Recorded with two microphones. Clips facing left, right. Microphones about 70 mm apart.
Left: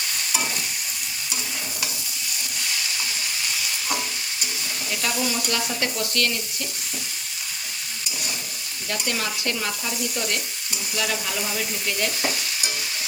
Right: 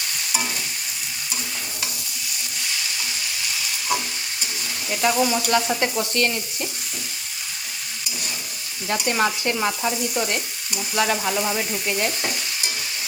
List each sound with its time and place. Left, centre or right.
5.0 s stir: right
8.9 s stir: right
10.9 s frying: right
11.5 s stir: right